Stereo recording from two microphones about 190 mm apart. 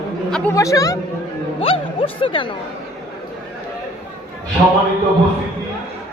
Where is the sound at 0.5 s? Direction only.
15° left (ahead or behind).